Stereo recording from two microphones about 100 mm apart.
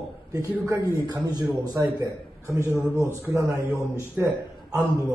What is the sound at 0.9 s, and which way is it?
A man's voice, 40° right (ahead or behind).